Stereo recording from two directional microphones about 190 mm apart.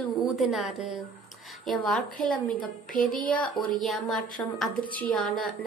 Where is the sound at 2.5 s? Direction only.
45° left (ahead or behind).